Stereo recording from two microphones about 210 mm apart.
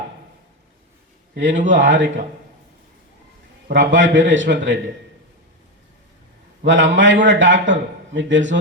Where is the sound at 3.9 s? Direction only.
65° right (ahead or behind).